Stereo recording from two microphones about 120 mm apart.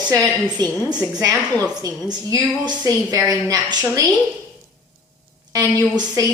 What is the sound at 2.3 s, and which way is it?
Speech, 35° right (ahead or behind).